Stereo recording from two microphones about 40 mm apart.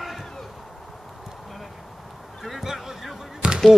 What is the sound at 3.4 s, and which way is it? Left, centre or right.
Basketball bounce, right.